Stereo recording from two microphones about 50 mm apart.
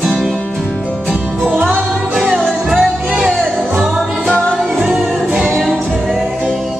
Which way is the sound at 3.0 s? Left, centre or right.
Centre.